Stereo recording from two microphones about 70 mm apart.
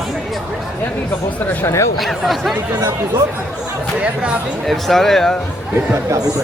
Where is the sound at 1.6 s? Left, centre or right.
Left.